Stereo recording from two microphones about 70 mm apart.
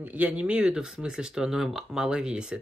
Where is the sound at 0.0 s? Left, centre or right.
Right.